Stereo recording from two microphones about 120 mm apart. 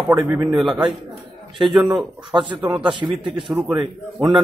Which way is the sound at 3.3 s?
Centre (ahead or behind).